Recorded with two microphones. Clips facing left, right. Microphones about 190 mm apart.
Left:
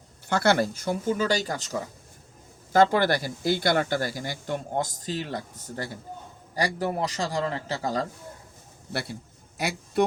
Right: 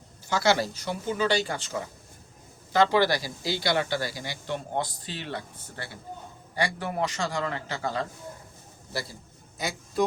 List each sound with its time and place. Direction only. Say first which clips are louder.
0.3 s speech: left 2 dB; 55° left (ahead or behind); by 1.7 s 40° left (ahead or behind)
2.7 s a man's voice: left 2 dB; 50° left (ahead or behind)
8.9 s a man's voice: left 3 dB; 60° left (ahead or behind)